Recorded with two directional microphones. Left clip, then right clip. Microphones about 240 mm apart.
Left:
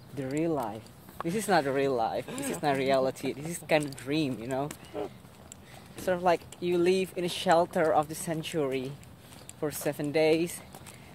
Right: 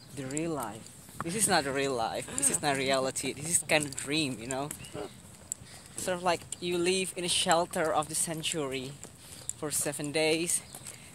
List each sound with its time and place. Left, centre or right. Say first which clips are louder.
0.2 s speech: left 4 dB; centre
2.2 s speech: left 1 dB; centre